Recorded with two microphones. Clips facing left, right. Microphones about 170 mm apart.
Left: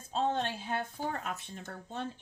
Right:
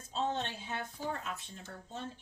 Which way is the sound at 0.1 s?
55° left (ahead or behind).